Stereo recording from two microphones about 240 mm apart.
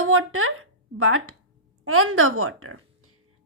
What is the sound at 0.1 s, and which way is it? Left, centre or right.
A woman's voice, right.